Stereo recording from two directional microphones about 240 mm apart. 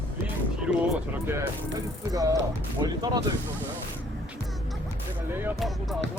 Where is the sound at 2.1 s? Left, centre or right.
Centre.